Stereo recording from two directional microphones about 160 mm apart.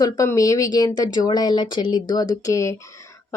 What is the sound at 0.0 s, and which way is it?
A woman's voice, 20° left (ahead or behind).